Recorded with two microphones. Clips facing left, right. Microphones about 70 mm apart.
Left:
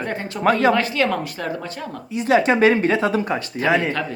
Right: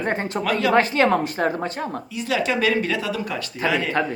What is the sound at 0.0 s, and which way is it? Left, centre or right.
Speech, right.